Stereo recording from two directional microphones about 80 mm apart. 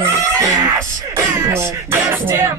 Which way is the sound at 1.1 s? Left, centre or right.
Right.